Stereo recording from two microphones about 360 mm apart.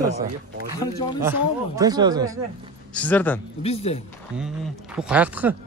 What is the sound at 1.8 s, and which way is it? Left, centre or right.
Speech, centre.